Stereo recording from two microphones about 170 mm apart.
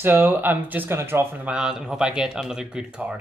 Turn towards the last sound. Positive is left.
turn(degrees=-5)  # may be behind; listen again after turning